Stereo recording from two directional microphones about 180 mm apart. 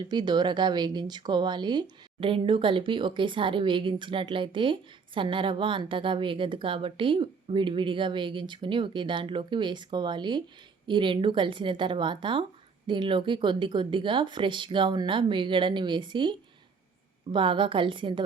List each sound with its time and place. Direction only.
0.1 s speech: 25° right (ahead or behind)
17.3 s speech: 30° right (ahead or behind)